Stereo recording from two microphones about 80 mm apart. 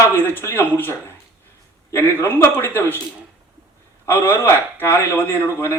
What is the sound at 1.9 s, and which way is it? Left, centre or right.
Speech, left.